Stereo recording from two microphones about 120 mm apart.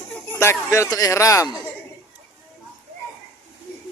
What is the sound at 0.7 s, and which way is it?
Speech, 25° left (ahead or behind).